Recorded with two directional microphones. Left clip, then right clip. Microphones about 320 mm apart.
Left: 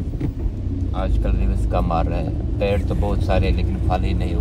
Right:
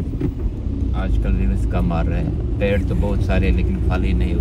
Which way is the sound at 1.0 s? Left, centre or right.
Left.